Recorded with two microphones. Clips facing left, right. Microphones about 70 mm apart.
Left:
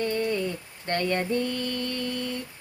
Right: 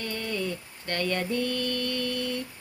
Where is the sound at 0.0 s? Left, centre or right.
Left.